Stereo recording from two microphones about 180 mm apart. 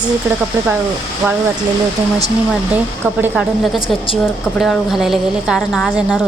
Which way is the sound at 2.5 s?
10° right (ahead or behind).